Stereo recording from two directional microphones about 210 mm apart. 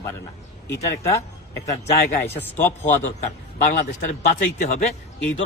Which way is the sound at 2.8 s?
35° left (ahead or behind).